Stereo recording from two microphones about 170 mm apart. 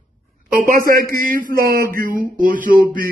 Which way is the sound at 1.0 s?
60° right (ahead or behind).